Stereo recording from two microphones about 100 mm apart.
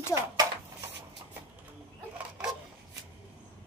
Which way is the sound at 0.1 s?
30° right (ahead or behind).